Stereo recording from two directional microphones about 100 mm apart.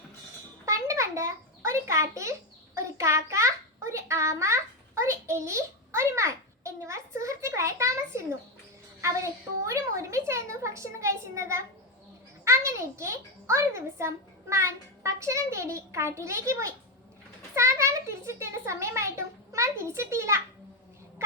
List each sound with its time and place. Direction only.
0.6 s a sound: 30° right (ahead or behind)
2.7 s child singing: 30° right (ahead or behind)
9.0 s a child's voice: 30° right (ahead or behind)